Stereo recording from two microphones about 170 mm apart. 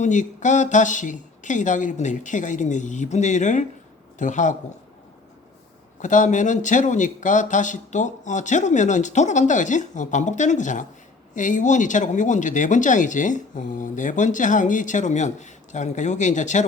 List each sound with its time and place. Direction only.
0.0 s speech: 45° left (ahead or behind)
6.0 s speech: 45° left (ahead or behind)